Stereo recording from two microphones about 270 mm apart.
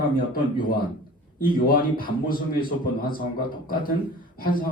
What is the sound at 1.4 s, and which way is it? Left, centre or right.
Speech, left.